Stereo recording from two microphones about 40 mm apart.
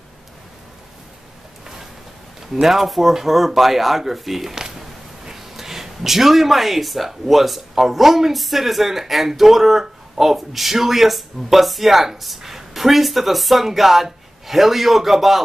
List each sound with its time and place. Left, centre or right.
2.4 s speech: centre
4.6 s speech: centre